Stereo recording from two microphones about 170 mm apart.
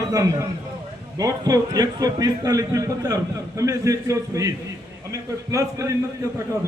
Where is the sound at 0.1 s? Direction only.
20° right (ahead or behind).